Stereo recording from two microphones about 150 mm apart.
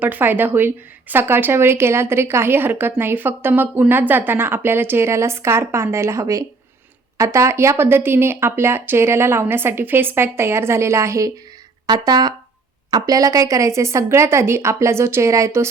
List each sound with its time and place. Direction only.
0.0 s a woman's voice: 10° right (ahead or behind)